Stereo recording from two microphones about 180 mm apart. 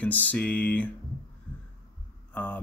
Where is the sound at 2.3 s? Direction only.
10° left (ahead or behind).